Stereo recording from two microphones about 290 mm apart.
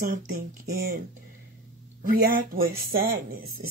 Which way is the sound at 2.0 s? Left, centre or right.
Right.